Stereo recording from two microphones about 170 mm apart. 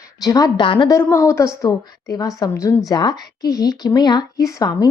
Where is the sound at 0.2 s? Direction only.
20° left (ahead or behind).